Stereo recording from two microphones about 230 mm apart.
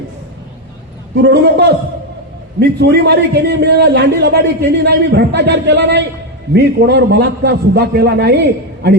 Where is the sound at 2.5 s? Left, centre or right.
Right.